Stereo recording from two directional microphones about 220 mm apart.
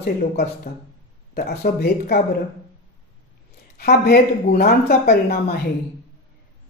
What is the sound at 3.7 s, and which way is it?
Speech, 45° left (ahead or behind).